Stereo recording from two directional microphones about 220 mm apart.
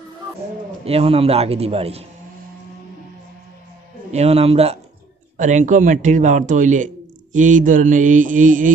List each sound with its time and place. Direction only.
0.8 s a man's voice: 25° right (ahead or behind)
4.1 s a man's voice: 30° right (ahead or behind)